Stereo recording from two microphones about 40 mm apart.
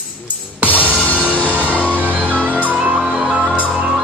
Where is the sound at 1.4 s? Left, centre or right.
Right.